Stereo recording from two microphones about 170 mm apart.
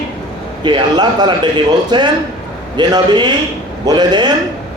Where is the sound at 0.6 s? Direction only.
25° right (ahead or behind).